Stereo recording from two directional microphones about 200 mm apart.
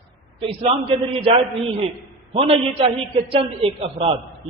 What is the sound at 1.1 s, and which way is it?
A man's voice, 25° right (ahead or behind).